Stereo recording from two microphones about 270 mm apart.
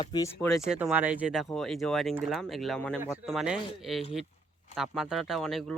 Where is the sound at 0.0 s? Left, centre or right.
Centre.